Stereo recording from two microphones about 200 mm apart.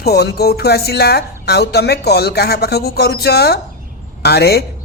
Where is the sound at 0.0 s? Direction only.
55° left (ahead or behind).